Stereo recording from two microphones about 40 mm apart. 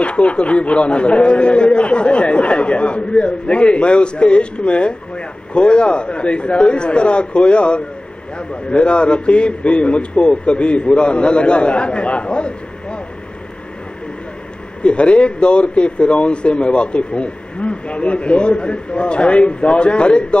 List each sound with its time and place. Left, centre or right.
0.0 s a man's voice: left
14.8 s a man's voice: left